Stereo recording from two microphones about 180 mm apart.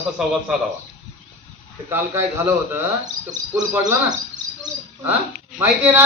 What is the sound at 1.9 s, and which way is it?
Speech, 10° right (ahead or behind).